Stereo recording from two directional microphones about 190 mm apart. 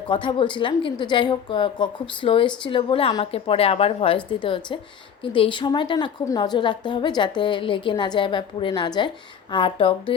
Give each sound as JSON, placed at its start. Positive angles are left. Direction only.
{"t": 0.1, "sound": "a woman's voice", "side_deg": 25}